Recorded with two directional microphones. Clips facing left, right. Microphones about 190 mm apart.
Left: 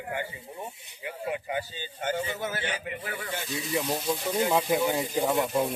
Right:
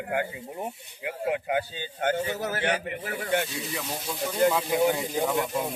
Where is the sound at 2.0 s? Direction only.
60° right (ahead or behind).